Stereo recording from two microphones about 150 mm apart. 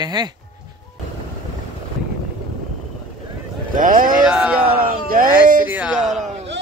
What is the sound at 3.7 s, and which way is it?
Speech, 65° right (ahead or behind).